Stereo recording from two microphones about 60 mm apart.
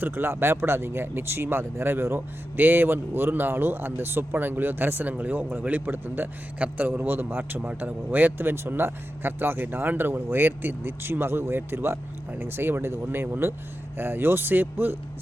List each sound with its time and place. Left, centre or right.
0.0 s speech: right